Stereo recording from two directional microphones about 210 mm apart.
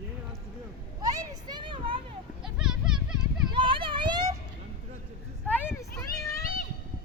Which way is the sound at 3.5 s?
25° right (ahead or behind).